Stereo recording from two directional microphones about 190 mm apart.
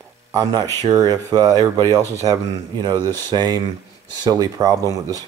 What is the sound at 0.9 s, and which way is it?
Speech, 20° right (ahead or behind).